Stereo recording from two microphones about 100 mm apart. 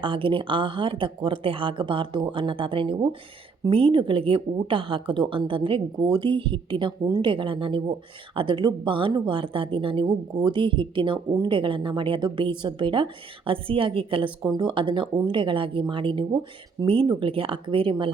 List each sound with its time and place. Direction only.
0.0 s a woman's voice: 60° right (ahead or behind)
10.3 s a woman's voice: 50° right (ahead or behind)
14.4 s a woman's voice: 45° right (ahead or behind)